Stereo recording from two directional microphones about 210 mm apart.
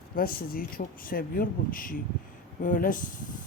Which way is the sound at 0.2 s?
45° left (ahead or behind).